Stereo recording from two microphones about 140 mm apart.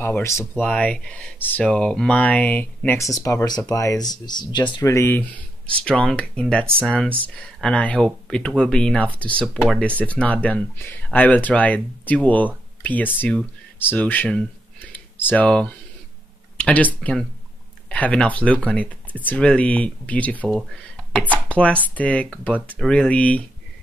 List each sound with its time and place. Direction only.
0.0 s speech: 15° left (ahead or behind)
0.7 s speech: 10° left (ahead or behind)
3.0 s speech: 25° left (ahead or behind)
4.7 s speech: 20° left (ahead or behind)
21.5 s speech: 10° left (ahead or behind)